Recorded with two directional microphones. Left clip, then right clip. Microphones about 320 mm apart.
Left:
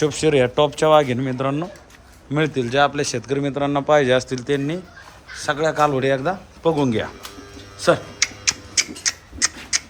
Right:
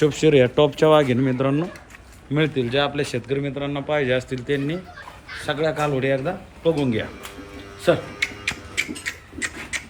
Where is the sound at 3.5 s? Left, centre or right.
Left.